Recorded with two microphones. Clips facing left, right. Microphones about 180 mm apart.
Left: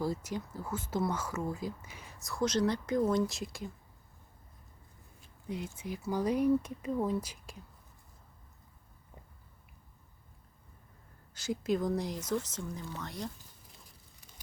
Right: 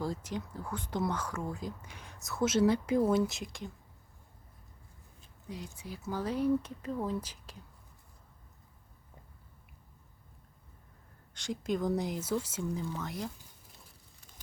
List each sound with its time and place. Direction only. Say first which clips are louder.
0.0 s speech: left 1 dB; 10° left (ahead or behind)
5.7 s speech: left 3 dB; 15° left (ahead or behind)
11.3 s speech: left 2 dB; 5° left (ahead or behind)